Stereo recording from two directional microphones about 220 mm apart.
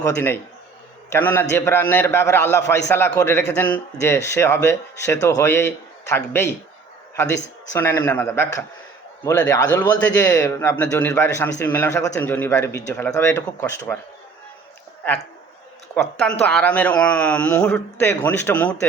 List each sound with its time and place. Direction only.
0.0 s a man's voice: 10° left (ahead or behind)
7.7 s a man's voice: 10° left (ahead or behind)
16.0 s a man's voice: 5° left (ahead or behind)